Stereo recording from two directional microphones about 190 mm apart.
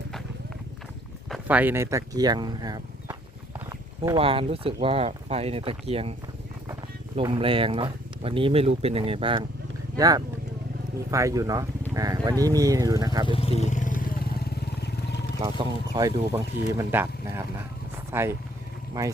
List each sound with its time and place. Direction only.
1.3 s speech: 10° right (ahead or behind); by 6.1 s 30° right (ahead or behind)
7.2 s speech: 25° right (ahead or behind)
13.2 s vehicle: 30° left (ahead or behind); by 15.2 s 60° left (ahead or behind)
15.4 s speech: 20° right (ahead or behind)